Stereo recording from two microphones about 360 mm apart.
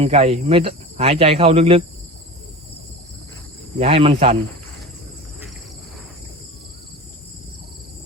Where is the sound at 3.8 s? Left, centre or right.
Centre.